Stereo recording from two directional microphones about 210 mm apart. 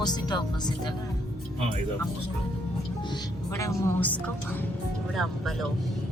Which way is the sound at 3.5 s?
15° left (ahead or behind).